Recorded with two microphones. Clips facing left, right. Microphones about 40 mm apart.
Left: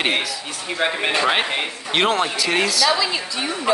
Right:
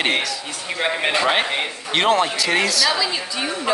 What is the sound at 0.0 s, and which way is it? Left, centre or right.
Speech, centre.